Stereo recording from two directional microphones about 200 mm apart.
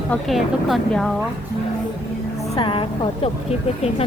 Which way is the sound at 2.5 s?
25° left (ahead or behind).